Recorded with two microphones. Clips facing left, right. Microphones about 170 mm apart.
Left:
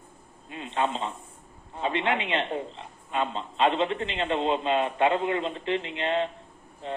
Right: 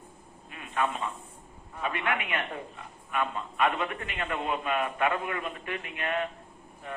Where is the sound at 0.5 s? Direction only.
25° left (ahead or behind).